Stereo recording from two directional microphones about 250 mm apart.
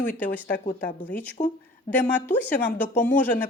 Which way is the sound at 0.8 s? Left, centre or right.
Left.